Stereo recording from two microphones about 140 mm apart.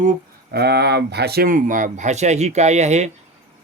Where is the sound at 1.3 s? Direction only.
90° right; by 3.1 s 55° right (ahead or behind).